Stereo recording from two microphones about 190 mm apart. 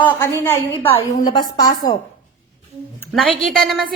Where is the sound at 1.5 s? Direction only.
20° left (ahead or behind).